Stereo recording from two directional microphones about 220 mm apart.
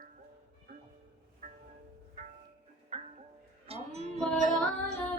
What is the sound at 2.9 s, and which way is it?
Music, 25° right (ahead or behind).